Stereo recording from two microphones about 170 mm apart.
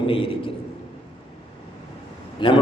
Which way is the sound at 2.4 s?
30° left (ahead or behind).